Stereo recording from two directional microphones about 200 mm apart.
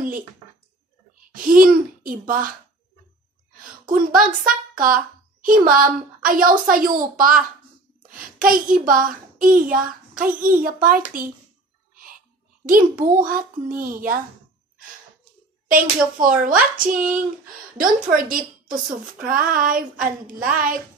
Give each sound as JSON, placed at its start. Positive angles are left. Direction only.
{"t": 1.3, "sound": "speech", "side_deg": -45}
{"t": 3.8, "sound": "a child's voice", "side_deg": -45}
{"t": 12.6, "sound": "speech", "side_deg": -45}
{"t": 15.7, "sound": "speech", "side_deg": -45}
{"t": 17.7, "sound": "speech", "side_deg": -45}